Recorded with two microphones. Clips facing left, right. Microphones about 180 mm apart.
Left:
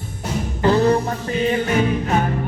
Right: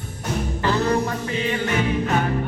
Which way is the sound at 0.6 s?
30° left (ahead or behind).